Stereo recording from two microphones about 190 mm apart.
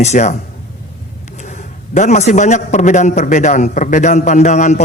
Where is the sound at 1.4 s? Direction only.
40° left (ahead or behind).